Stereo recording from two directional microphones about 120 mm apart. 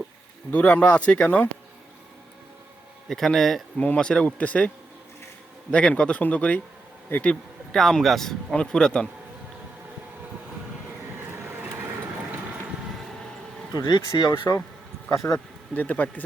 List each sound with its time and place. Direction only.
0.5 s speech: 10° left (ahead or behind)
3.1 s a man's voice: centre (ahead or behind)
5.7 s a man's voice: 10° left (ahead or behind)
11.2 s vehicle: 20° right (ahead or behind)
13.7 s speech: 35° left (ahead or behind)
15.7 s speech: 10° left (ahead or behind)